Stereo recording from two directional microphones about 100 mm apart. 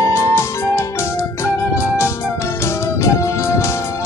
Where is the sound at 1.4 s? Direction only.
25° left (ahead or behind).